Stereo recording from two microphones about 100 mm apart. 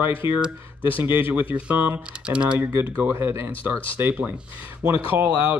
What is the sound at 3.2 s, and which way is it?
Speech, 25° right (ahead or behind).